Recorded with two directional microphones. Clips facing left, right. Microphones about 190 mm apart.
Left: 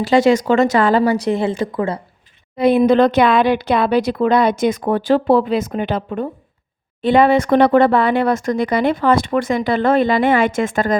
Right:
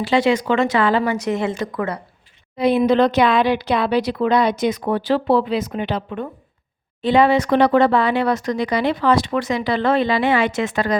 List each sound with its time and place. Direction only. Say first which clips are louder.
0.0 s speech: left 4 dB; 45° left (ahead or behind); by 2.0 s 25° left (ahead or behind)
2.6 s speech: left 3 dB; 50° left (ahead or behind)